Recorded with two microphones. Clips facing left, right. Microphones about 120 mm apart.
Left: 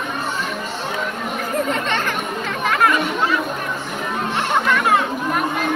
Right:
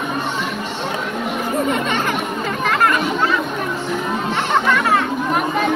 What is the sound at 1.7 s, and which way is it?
Music, 10° right (ahead or behind).